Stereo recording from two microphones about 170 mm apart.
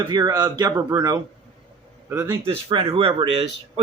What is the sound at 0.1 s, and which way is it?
Speech, 25° right (ahead or behind).